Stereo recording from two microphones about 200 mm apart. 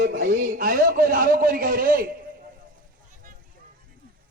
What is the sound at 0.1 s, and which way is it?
A man's voice, 50° right (ahead or behind).